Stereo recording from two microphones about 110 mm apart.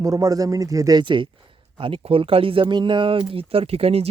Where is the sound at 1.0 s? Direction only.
45° right (ahead or behind).